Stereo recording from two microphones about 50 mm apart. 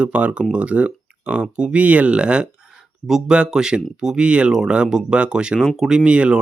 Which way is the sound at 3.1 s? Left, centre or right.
Centre.